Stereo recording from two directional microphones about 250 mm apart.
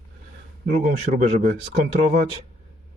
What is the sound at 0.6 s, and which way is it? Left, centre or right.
Speech, right.